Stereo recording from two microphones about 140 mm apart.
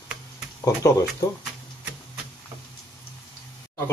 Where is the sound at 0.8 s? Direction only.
20° left (ahead or behind).